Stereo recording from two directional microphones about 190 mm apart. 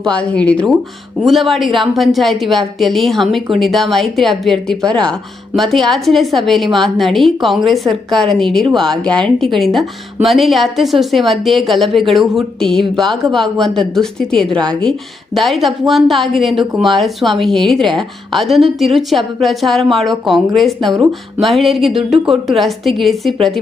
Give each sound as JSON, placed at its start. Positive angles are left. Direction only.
{"t": 0.0, "sound": "a woman's voice", "side_deg": 5}
{"t": 20.9, "sound": "speech", "side_deg": -15}
{"t": 21.4, "sound": "a woman's voice", "side_deg": 0}